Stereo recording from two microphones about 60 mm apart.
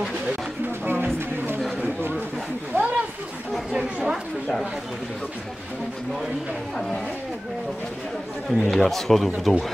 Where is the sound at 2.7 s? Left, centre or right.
Right.